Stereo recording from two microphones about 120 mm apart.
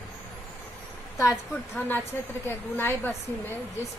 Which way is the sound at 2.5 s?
20° left (ahead or behind).